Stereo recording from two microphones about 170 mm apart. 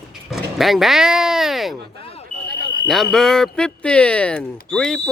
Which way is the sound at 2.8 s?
Centre (ahead or behind).